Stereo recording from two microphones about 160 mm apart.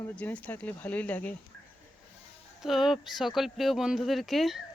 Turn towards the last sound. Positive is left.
turn(degrees=0)  # may be behind; listen again after turning